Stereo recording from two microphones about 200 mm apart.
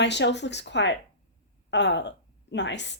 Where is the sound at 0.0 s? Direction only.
60° left (ahead or behind).